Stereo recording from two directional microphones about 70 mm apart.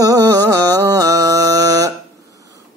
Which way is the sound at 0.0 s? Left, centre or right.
Right.